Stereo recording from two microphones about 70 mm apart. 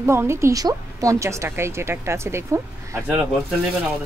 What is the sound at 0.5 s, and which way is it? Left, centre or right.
Speech, right.